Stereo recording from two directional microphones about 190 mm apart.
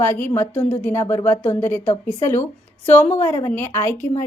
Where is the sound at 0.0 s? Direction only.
10° left (ahead or behind).